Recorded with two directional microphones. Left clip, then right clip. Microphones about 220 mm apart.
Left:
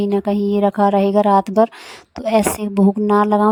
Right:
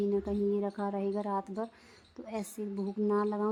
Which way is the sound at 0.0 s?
45° left (ahead or behind).